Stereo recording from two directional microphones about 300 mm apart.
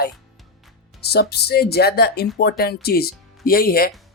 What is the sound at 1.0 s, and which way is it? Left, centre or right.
Speech, left.